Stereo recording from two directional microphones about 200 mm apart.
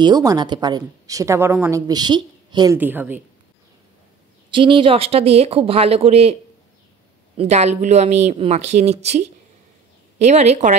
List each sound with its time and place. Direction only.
0.0 s a woman's voice: 20° right (ahead or behind)
2.8 s a woman's voice: 10° right (ahead or behind)
4.5 s a woman's voice: 25° right (ahead or behind)
7.3 s speech: 35° right (ahead or behind)